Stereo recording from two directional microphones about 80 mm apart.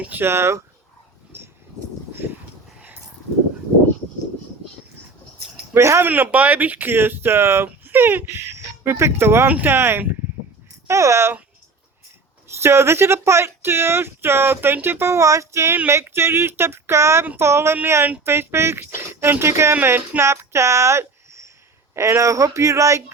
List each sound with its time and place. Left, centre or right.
0.0 s speech: right
1.3 s a sound: right
5.7 s speech: right
6.1 s speech: right
10.8 s speech: right
12.6 s speech: right